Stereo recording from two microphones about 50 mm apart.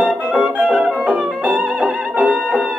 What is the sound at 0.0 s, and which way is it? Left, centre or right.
Music, right.